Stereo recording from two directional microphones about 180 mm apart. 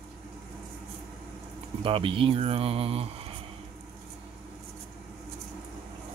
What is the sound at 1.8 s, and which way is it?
Speech, 30° right (ahead or behind).